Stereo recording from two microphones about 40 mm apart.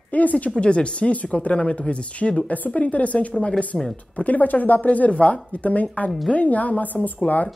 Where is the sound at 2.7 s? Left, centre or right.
Left.